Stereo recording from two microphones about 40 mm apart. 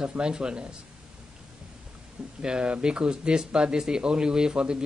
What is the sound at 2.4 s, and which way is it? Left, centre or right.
Speech, right.